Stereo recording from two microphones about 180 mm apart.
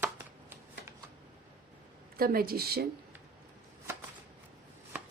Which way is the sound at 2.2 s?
55° right (ahead or behind).